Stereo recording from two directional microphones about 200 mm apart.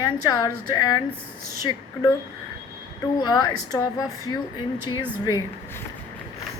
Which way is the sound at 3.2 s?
20° left (ahead or behind).